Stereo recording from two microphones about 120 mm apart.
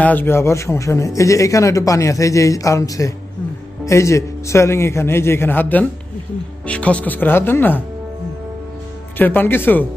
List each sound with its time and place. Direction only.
0.0 s speech: 15° left (ahead or behind)
9.2 s speech: 15° left (ahead or behind)